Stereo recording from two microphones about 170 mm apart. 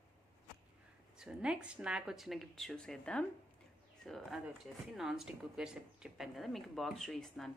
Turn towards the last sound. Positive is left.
turn(degrees=0)  # may be behind; listen again after turning